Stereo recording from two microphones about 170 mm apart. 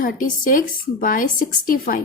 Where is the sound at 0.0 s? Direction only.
55° left (ahead or behind).